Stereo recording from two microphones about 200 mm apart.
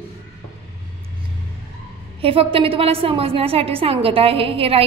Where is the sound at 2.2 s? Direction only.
30° right (ahead or behind).